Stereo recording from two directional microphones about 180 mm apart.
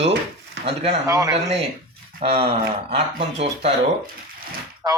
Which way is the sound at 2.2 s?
35° right (ahead or behind).